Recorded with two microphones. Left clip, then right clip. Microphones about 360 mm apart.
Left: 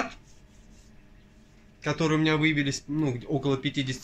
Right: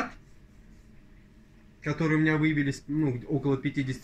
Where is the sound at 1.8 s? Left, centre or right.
Left.